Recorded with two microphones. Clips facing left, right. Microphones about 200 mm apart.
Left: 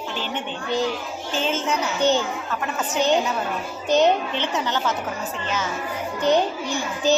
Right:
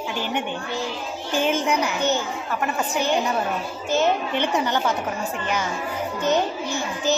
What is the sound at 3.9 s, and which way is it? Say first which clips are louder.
Speech: left 3 dB; 20° left (ahead or behind).